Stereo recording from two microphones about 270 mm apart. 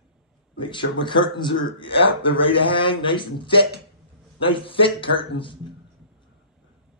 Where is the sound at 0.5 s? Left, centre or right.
Centre.